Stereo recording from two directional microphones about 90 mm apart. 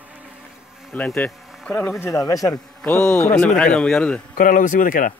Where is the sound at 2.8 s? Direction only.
15° left (ahead or behind).